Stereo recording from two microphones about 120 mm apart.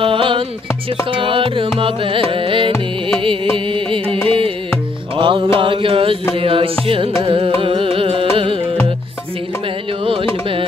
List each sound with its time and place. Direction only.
0.0 s music: 45° right (ahead or behind)
1.1 s mantra: 45° right (ahead or behind)
6.3 s music: 50° right (ahead or behind)